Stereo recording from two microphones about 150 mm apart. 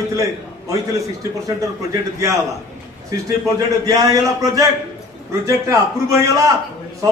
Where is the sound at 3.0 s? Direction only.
20° right (ahead or behind).